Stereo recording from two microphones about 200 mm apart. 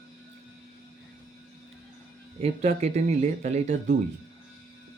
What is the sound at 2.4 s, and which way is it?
Speech, 35° right (ahead or behind).